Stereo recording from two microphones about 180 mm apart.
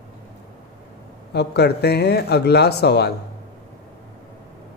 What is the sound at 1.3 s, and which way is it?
Speech, 65° left (ahead or behind).